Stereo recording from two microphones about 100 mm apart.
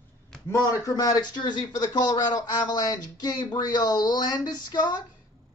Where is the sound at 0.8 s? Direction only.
35° left (ahead or behind).